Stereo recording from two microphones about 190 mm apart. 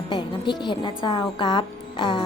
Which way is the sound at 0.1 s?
25° left (ahead or behind).